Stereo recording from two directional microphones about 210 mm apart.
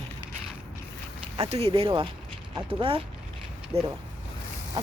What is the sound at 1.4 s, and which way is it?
Speech, 30° right (ahead or behind).